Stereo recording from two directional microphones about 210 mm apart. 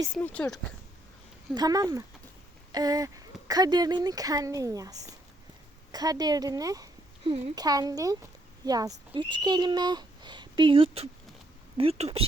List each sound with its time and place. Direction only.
0.1 s speech: 5° left (ahead or behind)
1.5 s speech: 20° right (ahead or behind)